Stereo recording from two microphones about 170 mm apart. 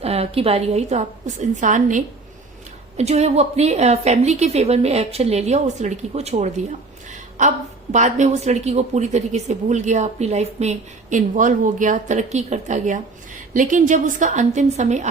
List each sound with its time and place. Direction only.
0.0 s a woman's voice: 35° right (ahead or behind)